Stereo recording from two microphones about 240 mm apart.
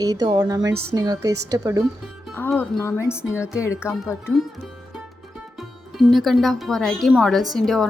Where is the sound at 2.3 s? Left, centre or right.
Centre.